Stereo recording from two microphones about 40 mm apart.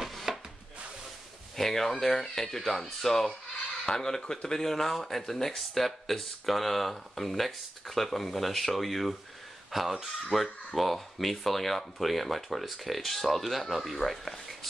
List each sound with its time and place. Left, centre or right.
0.0 s wood: centre
1.6 s speech: centre
13.9 s speech: centre